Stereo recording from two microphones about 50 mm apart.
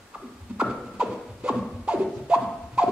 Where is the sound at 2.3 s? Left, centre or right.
Centre.